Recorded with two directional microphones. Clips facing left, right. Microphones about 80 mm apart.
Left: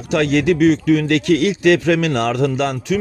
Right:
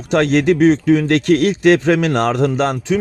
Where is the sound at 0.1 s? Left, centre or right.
Right.